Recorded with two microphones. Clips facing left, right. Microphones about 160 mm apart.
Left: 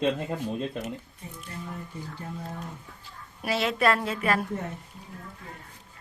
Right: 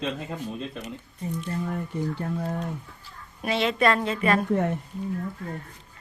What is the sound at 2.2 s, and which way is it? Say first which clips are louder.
Speech: right 8 dB; 85° right.